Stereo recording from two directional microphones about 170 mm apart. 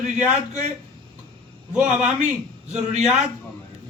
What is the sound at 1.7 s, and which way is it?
Speech, 5° right (ahead or behind).